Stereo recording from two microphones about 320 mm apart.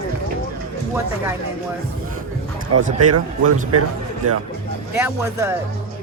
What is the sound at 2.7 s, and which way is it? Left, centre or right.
Speech, right.